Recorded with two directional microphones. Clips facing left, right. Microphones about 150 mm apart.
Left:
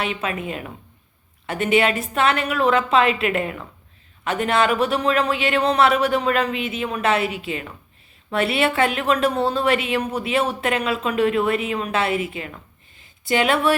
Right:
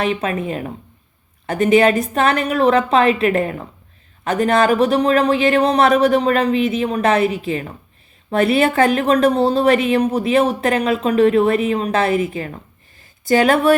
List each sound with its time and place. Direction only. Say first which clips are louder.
0.0 s speech: right 6 dB; 40° right (ahead or behind)